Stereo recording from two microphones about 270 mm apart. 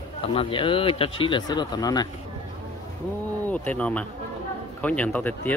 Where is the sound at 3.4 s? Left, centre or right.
Centre.